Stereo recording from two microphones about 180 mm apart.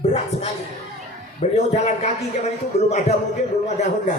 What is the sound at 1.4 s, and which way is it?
Speech, 35° left (ahead or behind).